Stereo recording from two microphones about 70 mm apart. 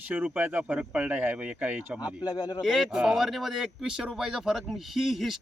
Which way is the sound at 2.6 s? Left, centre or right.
Centre.